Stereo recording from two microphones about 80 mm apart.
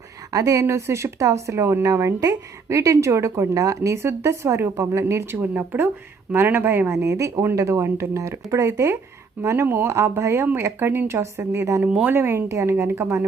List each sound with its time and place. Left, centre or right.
0.3 s speech: right
11.8 s speech: centre
12.1 s speech: right